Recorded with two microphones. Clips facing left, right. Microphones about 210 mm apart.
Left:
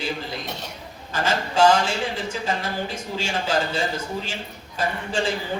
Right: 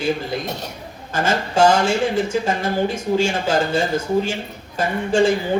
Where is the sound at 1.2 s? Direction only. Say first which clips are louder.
Right 2 dB; 45° right (ahead or behind).